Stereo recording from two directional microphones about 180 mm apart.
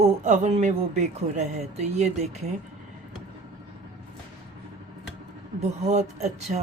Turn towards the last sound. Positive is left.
turn(degrees=-40)  # may be behind; listen again after turning